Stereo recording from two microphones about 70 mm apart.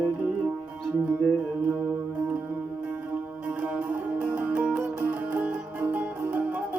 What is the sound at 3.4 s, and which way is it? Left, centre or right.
Music, centre.